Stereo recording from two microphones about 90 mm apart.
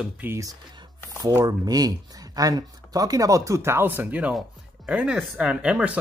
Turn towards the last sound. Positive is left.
turn(degrees=-10)  # may be behind; listen again after turning